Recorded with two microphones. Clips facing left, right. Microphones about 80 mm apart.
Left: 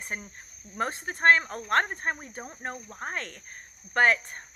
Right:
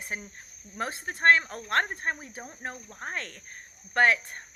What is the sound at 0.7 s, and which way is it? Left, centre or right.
Speech, centre.